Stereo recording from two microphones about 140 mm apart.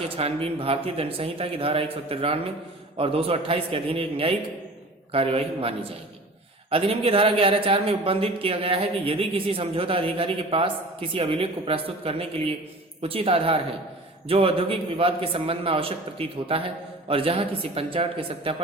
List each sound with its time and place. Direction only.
0.2 s speech: 45° right (ahead or behind)